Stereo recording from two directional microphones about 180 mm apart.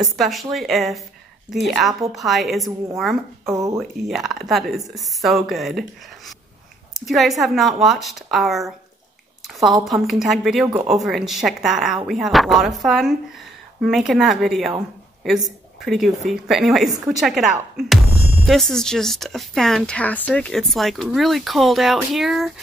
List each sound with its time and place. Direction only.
0.0 s speech: centre (ahead or behind)
3.4 s speech: 15° right (ahead or behind)
4.1 s speech: centre (ahead or behind)
9.5 s a sound: centre (ahead or behind)
9.8 s speech: centre (ahead or behind)